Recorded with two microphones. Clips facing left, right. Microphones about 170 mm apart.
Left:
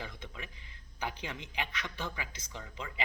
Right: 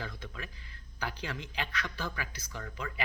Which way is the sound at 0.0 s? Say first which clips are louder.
Right 2 dB; 20° left (ahead or behind).